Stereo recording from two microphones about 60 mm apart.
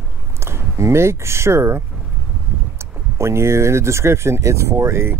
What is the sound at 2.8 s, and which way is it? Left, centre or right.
Speech, right.